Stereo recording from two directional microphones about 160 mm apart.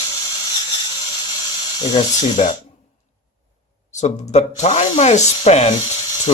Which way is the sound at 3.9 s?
45° left (ahead or behind).